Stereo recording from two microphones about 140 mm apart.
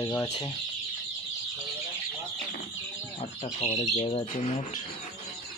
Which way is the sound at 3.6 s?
50° left (ahead or behind).